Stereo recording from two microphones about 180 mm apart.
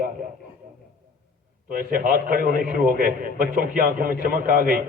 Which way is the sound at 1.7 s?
50° right (ahead or behind).